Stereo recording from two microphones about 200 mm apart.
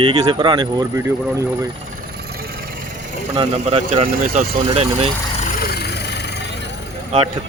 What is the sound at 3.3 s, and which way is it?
Speech, 30° right (ahead or behind).